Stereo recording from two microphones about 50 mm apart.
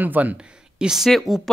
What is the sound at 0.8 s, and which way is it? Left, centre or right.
Speech, centre.